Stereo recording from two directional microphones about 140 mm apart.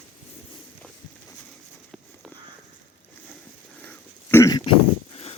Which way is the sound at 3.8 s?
15° left (ahead or behind).